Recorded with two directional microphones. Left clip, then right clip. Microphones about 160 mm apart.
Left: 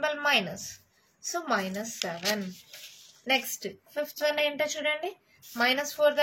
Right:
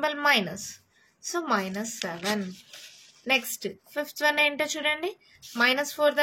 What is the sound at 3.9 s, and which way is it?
A woman's voice, 50° right (ahead or behind).